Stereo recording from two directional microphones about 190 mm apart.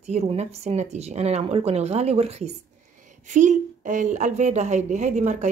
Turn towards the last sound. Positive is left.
turn(degrees=-40)  # may be behind; listen again after turning